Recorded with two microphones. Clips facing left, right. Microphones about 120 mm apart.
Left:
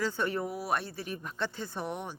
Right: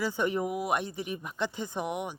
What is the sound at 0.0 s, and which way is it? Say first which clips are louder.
Speech: right 2 dB; 15° right (ahead or behind).